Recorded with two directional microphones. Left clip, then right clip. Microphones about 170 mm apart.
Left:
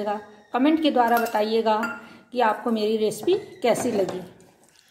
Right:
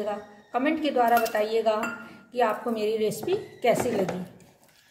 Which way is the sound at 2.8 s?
45° left (ahead or behind).